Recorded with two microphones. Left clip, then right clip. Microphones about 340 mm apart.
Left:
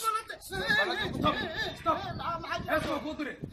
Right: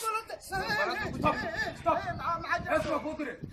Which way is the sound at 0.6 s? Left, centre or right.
Centre.